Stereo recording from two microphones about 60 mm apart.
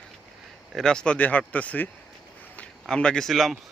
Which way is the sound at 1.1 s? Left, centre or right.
Left.